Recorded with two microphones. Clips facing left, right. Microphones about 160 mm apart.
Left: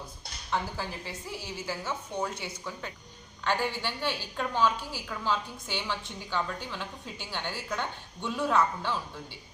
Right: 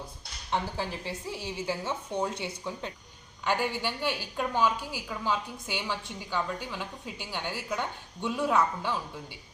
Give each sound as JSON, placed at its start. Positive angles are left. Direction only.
{"t": 0.8, "sound": "a woman's voice", "side_deg": -25}
{"t": 3.4, "sound": "a woman's voice", "side_deg": -10}